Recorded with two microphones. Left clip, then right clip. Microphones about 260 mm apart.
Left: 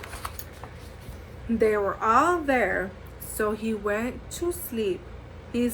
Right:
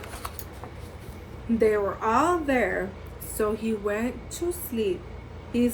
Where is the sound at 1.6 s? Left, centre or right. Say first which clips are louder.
Even; centre.